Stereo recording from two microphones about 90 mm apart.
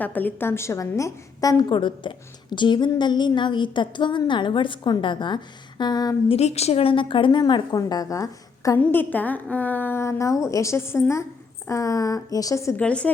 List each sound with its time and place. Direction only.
0.0 s a woman's voice: 20° left (ahead or behind); by 1.6 s 40° left (ahead or behind)
1.7 s a woman's voice: 65° left (ahead or behind); by 6.1 s 50° left (ahead or behind)
6.7 s a woman's voice: 80° left; by 7.8 s 55° left (ahead or behind)
7.8 s a woman's voice: 40° left (ahead or behind)
8.9 s a woman's voice: 20° left (ahead or behind)
11.7 s a woman's voice: 40° left (ahead or behind)
12.7 s a woman's voice: 15° left (ahead or behind)